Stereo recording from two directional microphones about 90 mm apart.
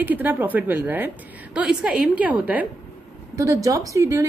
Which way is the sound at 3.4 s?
40° right (ahead or behind).